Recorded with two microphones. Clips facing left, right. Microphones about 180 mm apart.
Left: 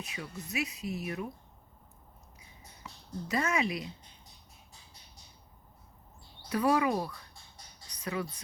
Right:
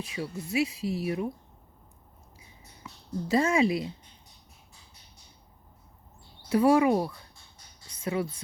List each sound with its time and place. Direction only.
0.0 s speech: 30° right (ahead or behind)
3.2 s speech: 30° right (ahead or behind)
6.5 s speech: 25° right (ahead or behind)
7.9 s a sound: 25° right (ahead or behind)